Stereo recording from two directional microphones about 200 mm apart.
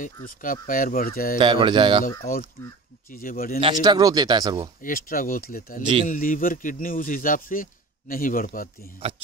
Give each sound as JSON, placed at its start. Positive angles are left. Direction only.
{"t": 0.0, "sound": "speech", "side_deg": 40}
{"t": 1.4, "sound": "speech", "side_deg": -25}
{"t": 2.0, "sound": "speech", "side_deg": 40}
{"t": 3.6, "sound": "speech", "side_deg": -20}
{"t": 4.8, "sound": "speech", "side_deg": 45}
{"t": 9.0, "sound": "speech", "side_deg": -30}